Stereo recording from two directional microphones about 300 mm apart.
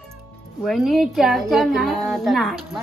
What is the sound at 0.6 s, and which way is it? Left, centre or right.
A woman's voice, centre.